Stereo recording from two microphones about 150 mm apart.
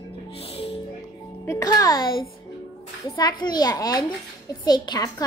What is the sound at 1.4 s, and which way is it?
Speech, 25° left (ahead or behind).